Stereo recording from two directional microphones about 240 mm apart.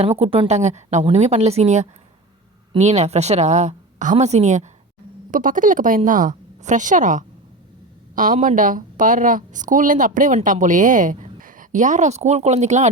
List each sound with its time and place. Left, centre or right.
0.0 s a woman's voice: right